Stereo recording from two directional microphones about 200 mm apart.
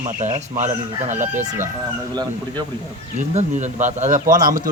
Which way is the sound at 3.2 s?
35° right (ahead or behind).